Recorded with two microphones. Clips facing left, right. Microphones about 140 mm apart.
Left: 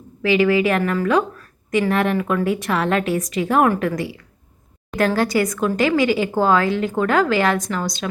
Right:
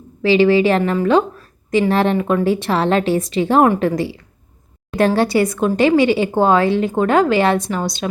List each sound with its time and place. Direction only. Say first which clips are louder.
0.2 s a woman's voice: right 4 dB; 30° right (ahead or behind)